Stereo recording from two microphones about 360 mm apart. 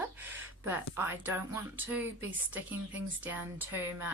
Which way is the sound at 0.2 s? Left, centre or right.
Centre.